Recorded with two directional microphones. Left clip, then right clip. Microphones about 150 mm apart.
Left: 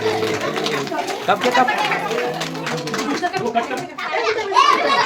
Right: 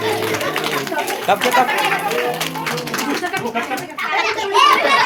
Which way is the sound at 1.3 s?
20° left (ahead or behind).